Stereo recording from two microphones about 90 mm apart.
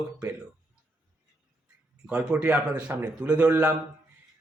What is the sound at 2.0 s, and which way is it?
Speech, 10° right (ahead or behind).